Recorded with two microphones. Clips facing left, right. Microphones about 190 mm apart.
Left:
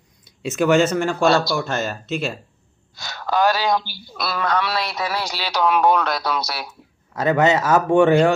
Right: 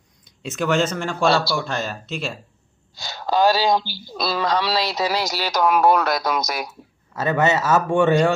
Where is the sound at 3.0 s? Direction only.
30° right (ahead or behind).